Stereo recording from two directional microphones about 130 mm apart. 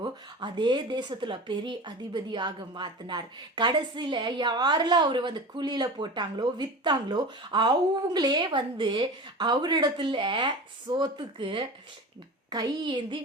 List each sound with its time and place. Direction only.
0.0 s speech: 35° right (ahead or behind)